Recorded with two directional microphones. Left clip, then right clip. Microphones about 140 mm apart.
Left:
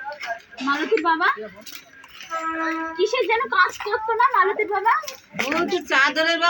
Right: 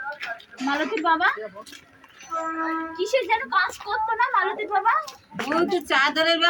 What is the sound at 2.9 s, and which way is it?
A woman's voice, 35° right (ahead or behind).